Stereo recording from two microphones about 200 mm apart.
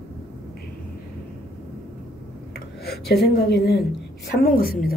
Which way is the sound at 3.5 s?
55° left (ahead or behind).